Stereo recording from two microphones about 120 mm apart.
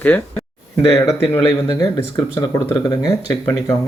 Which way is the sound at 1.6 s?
30° left (ahead or behind).